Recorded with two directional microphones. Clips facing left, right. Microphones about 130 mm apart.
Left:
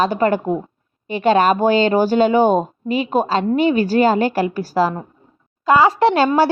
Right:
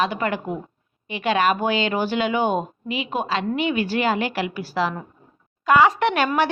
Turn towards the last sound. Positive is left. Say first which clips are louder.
# left 6 dB
turn(degrees=30)  # may be behind; listen again after turning